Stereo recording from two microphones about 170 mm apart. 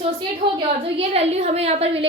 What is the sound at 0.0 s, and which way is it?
A woman's voice, 30° right (ahead or behind).